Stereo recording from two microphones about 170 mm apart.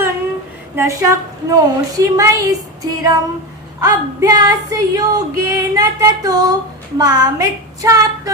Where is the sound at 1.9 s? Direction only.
20° right (ahead or behind).